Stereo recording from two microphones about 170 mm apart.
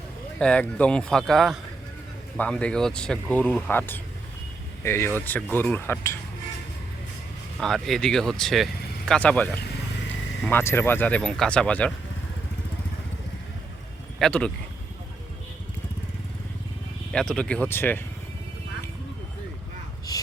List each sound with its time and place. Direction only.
0.3 s speech: 5° left (ahead or behind)
7.6 s speech: centre (ahead or behind)
14.2 s speech: 5° left (ahead or behind)
17.1 s speech: 5° left (ahead or behind)